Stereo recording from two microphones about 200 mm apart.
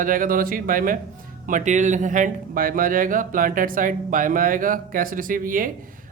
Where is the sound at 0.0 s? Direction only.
45° right (ahead or behind).